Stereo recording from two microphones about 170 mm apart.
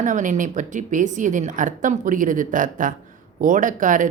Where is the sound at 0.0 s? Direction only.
50° right (ahead or behind).